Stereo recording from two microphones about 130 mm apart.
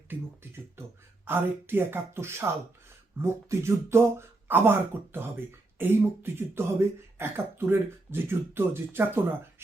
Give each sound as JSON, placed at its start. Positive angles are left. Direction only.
{"t": 1.2, "sound": "speech", "side_deg": -15}